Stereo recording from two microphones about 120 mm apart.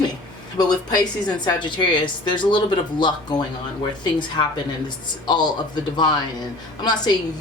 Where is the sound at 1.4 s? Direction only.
40° left (ahead or behind).